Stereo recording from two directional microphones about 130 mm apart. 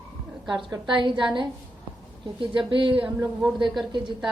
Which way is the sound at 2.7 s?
40° right (ahead or behind).